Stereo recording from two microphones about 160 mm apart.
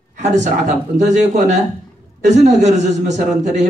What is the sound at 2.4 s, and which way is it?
Speech, 45° right (ahead or behind).